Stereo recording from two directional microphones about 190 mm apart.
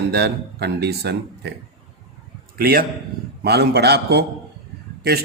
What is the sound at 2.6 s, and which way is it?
A man's voice, 55° right (ahead or behind).